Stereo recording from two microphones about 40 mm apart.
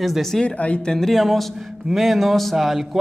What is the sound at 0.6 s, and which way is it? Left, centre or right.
Speech, left.